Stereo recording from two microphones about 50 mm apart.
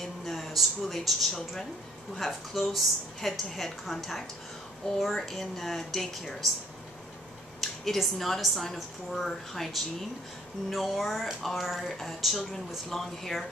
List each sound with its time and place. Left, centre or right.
0.0 s a sound: centre
1.4 s a woman's voice: centre
7.6 s a woman's voice: centre